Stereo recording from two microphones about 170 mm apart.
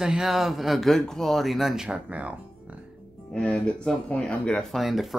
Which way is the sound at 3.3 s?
5° left (ahead or behind).